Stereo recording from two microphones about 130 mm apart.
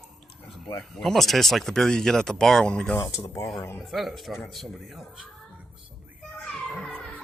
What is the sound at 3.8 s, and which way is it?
Speech, centre (ahead or behind).